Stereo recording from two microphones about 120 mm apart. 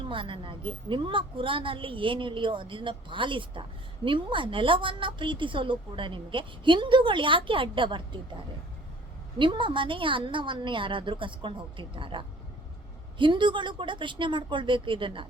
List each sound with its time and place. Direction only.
0.0 s a woman's voice: 45° right (ahead or behind)
9.4 s a woman's voice: 45° right (ahead or behind)